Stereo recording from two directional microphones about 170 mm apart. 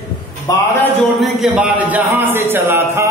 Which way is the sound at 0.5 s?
20° left (ahead or behind).